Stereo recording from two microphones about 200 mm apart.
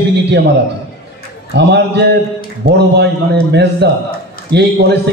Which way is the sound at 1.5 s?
60° right (ahead or behind).